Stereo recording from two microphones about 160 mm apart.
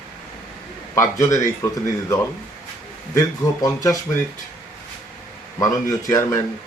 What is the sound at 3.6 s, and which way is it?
Speech, 20° left (ahead or behind).